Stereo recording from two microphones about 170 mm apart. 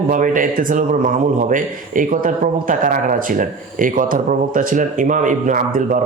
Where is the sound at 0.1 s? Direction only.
50° right (ahead or behind).